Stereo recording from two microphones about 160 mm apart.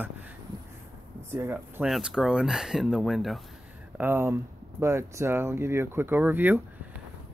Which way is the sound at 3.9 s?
15° right (ahead or behind).